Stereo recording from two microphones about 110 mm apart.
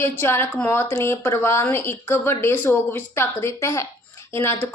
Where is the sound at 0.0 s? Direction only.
20° left (ahead or behind).